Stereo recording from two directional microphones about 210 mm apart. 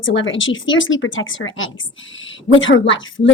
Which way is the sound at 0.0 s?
65° left (ahead or behind).